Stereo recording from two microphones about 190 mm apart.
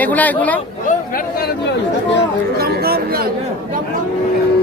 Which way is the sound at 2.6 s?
55° right (ahead or behind).